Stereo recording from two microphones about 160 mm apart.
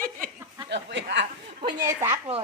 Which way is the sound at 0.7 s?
90° right.